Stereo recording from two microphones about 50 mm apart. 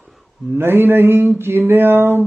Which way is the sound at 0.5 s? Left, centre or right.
Right.